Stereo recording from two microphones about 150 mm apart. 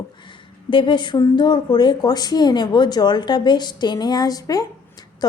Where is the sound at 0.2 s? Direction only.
35° left (ahead or behind).